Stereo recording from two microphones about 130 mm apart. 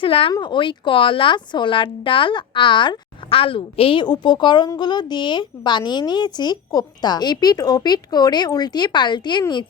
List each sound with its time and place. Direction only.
0.0 s a woman's voice: 45° left (ahead or behind)